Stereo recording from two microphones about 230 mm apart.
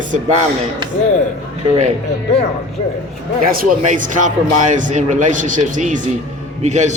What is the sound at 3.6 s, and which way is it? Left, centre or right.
Speech, right.